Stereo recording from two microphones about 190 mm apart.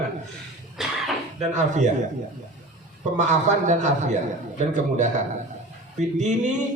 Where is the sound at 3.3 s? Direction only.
40° right (ahead or behind).